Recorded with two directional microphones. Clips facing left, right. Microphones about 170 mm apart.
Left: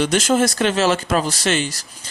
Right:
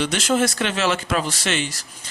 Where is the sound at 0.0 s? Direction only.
45° left (ahead or behind).